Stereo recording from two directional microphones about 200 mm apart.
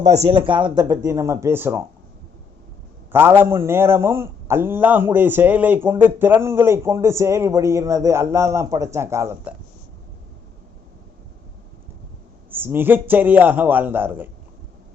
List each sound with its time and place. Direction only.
0.3 s a man's voice: 25° right (ahead or behind)
3.1 s a man's voice: 10° right (ahead or behind)
12.5 s a man's voice: 10° right (ahead or behind)